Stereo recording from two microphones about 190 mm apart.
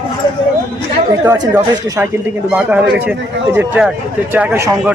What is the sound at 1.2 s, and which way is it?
Speech, 15° right (ahead or behind).